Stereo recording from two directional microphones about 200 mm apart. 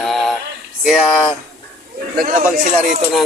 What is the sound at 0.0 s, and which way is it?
Male singing, centre (ahead or behind).